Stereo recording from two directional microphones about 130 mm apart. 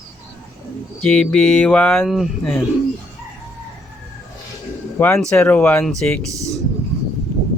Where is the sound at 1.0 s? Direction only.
5° left (ahead or behind).